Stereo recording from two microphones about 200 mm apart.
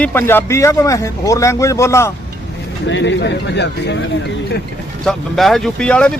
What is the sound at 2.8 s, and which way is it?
Speech, 65° left (ahead or behind).